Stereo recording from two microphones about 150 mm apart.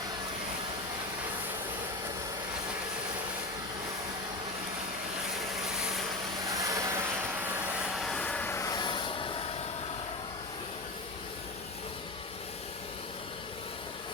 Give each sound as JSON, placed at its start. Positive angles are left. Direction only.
{"t": 6.7, "sound": "vehicle", "side_deg": -20}
{"t": 7.9, "sound": "vehicle", "side_deg": 0}